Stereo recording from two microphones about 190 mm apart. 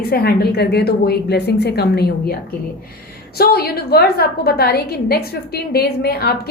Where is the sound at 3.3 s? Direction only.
55° left (ahead or behind).